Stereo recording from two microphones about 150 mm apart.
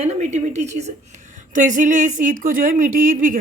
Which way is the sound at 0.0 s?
50° right (ahead or behind).